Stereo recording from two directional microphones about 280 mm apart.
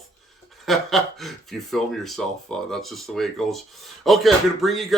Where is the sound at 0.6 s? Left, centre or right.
Centre.